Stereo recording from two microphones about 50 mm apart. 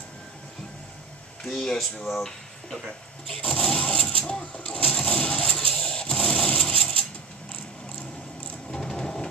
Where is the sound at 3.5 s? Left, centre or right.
Centre.